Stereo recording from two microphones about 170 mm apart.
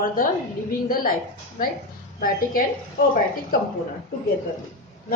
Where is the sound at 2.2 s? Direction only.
60° left (ahead or behind).